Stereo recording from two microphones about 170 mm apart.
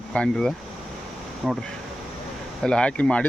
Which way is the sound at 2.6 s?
5° left (ahead or behind).